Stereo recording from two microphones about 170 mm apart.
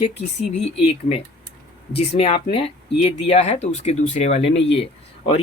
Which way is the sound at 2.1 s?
35° left (ahead or behind).